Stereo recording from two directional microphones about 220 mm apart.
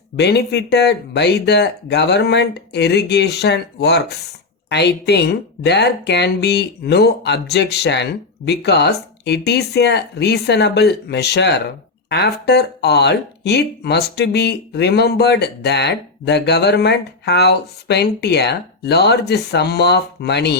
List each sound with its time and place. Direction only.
0.2 s speech: 50° left (ahead or behind)